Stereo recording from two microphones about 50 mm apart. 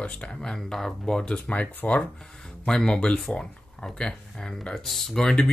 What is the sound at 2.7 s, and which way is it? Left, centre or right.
Speech, centre.